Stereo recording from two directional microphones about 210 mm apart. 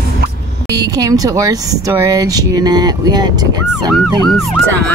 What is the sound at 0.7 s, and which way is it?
Speech, 15° right (ahead or behind).